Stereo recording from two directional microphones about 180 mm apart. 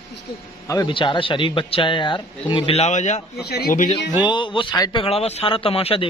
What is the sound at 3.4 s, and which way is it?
Speech, 60° left (ahead or behind).